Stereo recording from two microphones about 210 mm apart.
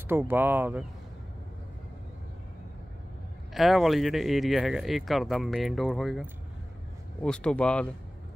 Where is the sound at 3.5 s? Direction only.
Centre (ahead or behind).